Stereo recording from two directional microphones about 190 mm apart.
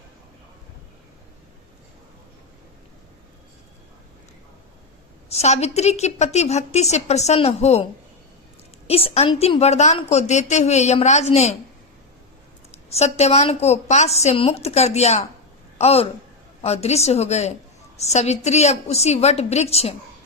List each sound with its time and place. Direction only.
5.3 s a woman's voice: 35° left (ahead or behind)
8.9 s a woman's voice: 30° left (ahead or behind)
12.9 s a woman's voice: 35° left (ahead or behind)